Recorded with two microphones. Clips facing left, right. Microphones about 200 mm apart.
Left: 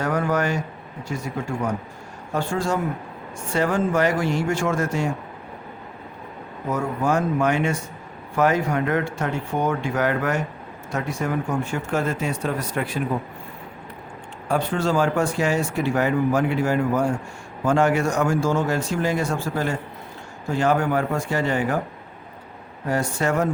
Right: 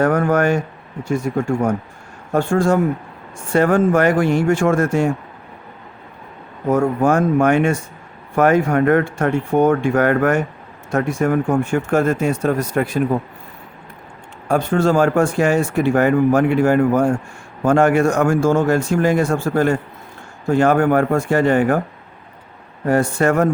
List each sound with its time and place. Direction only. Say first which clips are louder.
0.0 s speech: right 7 dB; 50° right (ahead or behind)
6.7 s speech: right 7 dB; 50° right (ahead or behind)
14.4 s speech: right 6 dB; 45° right (ahead or behind)
22.9 s speech: right 7 dB; 55° right (ahead or behind)